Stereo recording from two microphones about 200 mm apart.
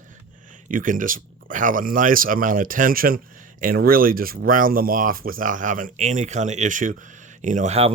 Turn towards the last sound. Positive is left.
turn(degrees=-30)  # may be behind; listen again after turning